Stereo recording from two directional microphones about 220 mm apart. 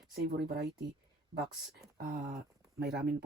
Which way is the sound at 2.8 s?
45° right (ahead or behind).